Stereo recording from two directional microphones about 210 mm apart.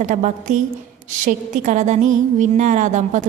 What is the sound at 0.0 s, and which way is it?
A woman's voice, 35° right (ahead or behind).